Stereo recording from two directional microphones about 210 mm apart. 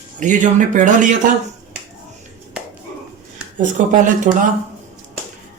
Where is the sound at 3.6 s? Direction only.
35° right (ahead or behind).